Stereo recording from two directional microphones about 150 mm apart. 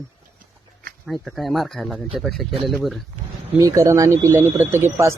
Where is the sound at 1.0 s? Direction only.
Centre (ahead or behind).